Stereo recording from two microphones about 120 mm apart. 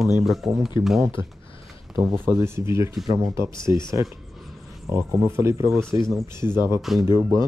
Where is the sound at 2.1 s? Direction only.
20° right (ahead or behind).